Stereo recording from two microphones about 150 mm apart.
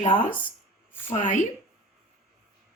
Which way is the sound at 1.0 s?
60° left (ahead or behind).